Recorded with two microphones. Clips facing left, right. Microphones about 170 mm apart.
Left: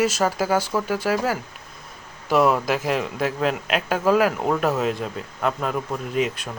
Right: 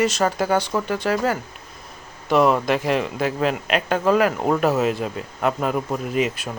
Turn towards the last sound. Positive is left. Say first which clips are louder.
# right 1 dB
turn(degrees=-5)  # may be behind; listen again after turning